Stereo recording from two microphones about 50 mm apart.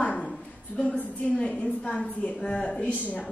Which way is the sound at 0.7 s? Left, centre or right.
Left.